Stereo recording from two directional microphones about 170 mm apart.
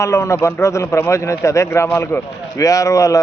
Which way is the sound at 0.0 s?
15° left (ahead or behind).